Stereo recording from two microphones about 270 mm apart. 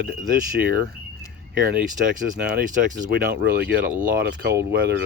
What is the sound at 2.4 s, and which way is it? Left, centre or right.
Speech, right.